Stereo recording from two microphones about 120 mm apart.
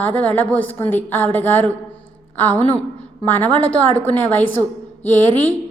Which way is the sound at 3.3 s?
15° left (ahead or behind).